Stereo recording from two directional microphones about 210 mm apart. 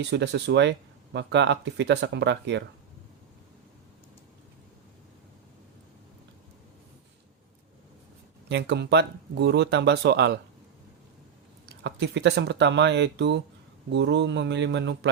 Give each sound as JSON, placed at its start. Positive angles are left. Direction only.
{"t": 0.0, "sound": "speech", "side_deg": -55}
{"t": 8.4, "sound": "speech", "side_deg": -55}
{"t": 11.8, "sound": "speech", "side_deg": -55}